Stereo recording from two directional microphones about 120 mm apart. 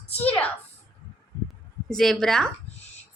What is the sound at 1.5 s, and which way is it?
A woman's voice, 5° left (ahead or behind).